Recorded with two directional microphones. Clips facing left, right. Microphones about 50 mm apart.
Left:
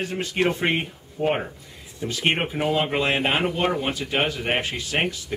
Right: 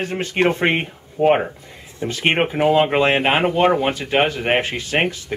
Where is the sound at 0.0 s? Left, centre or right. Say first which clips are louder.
Right 4 dB; right.